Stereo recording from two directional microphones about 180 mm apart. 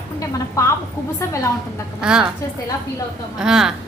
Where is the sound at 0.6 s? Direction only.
15° left (ahead or behind).